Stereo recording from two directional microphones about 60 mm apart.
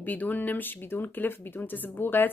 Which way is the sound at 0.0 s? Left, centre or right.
Left.